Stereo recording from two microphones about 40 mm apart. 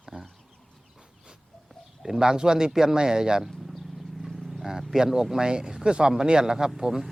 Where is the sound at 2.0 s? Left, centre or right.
Centre.